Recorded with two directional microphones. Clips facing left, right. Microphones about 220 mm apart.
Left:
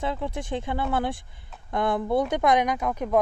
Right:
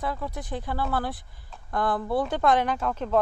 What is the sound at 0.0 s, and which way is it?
A woman's voice, 25° left (ahead or behind).